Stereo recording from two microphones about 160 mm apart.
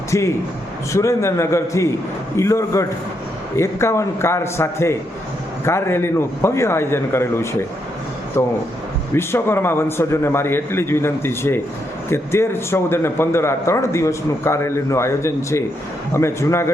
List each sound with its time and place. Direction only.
0.1 s a man's voice: 20° left (ahead or behind)